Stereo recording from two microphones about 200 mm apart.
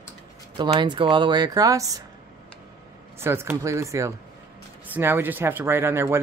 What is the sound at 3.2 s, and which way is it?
Speech, 10° right (ahead or behind).